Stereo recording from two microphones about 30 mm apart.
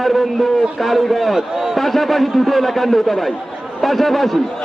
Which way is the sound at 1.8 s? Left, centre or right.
Centre.